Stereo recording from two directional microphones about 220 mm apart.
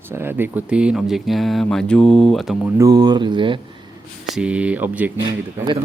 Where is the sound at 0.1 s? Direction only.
10° right (ahead or behind).